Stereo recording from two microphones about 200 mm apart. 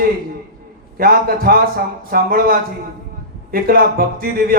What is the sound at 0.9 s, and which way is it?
Speech, 45° right (ahead or behind).